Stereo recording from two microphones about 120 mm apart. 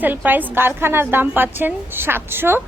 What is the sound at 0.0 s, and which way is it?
A woman's voice, 15° right (ahead or behind).